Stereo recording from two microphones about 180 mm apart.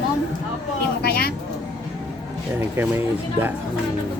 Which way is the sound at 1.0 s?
55° left (ahead or behind).